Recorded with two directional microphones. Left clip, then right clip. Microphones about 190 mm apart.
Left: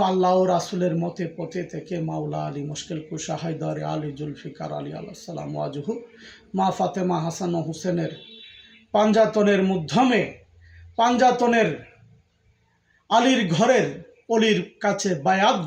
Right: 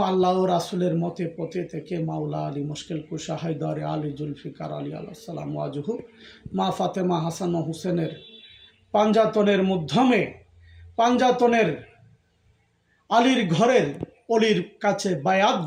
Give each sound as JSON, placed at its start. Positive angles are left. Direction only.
{"t": 0.0, "sound": "speech", "side_deg": -5}
{"t": 13.1, "sound": "speech", "side_deg": -10}